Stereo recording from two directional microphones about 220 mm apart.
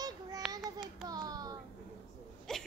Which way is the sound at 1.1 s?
15° right (ahead or behind).